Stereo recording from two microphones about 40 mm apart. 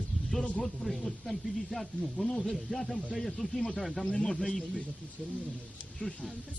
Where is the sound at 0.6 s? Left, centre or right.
Centre.